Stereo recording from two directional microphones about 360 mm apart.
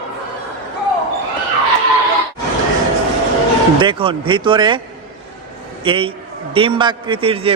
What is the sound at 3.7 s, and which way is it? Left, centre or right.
Speech, centre.